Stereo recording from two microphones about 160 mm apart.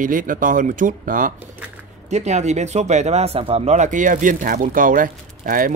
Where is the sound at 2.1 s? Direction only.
45° right (ahead or behind).